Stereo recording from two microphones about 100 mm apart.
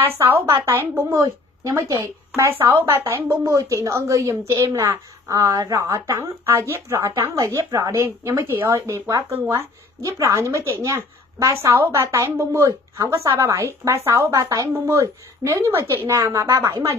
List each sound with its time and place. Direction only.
0.0 s speech: 20° right (ahead or behind)
3.4 s a woman's voice: 35° right (ahead or behind)